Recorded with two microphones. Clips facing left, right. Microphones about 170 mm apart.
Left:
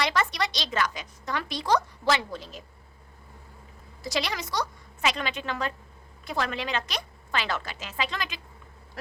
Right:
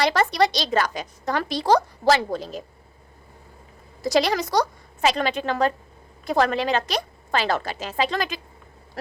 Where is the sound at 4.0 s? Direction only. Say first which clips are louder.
Right 10 dB; 40° right (ahead or behind).